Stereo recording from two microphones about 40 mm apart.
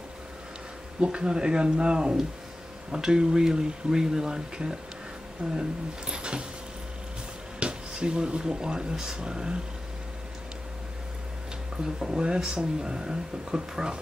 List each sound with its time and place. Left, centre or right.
1.0 s speech: right
7.6 s speech: right
11.8 s speech: centre